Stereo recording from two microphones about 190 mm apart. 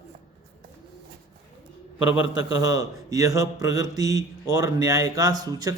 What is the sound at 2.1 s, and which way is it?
Speech, 85° left.